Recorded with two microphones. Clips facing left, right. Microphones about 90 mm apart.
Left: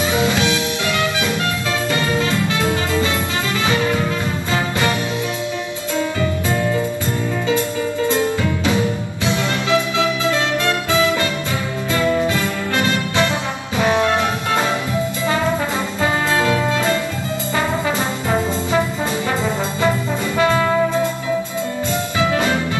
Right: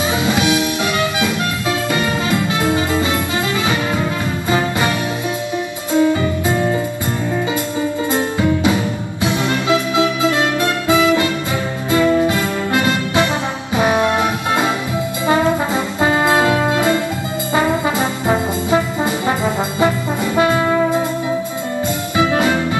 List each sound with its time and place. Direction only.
0.1 s music: 15° right (ahead or behind)
2.0 s music: 20° right (ahead or behind)
8.1 s music: 20° right (ahead or behind)
16.0 s music: 20° right (ahead or behind)
22.3 s music: 20° right (ahead or behind)